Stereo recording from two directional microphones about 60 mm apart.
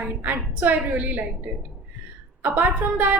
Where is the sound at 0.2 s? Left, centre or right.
Right.